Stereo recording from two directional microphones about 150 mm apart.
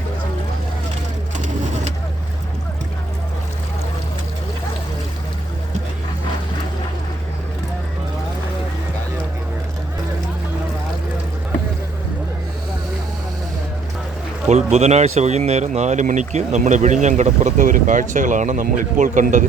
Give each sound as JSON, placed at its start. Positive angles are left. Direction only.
{"t": 14.5, "sound": "speech", "side_deg": -45}